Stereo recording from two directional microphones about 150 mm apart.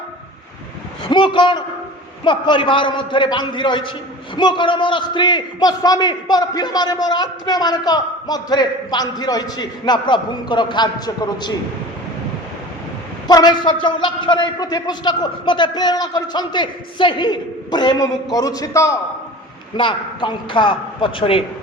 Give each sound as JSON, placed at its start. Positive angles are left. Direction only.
{"t": 1.0, "sound": "a man's voice", "side_deg": 35}
{"t": 13.2, "sound": "a man's voice", "side_deg": 25}
{"t": 19.7, "sound": "a man's voice", "side_deg": 35}